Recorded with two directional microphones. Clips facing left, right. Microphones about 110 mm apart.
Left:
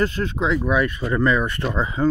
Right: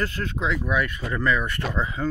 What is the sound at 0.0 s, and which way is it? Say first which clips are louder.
Speech: left 5 dB; 25° left (ahead or behind).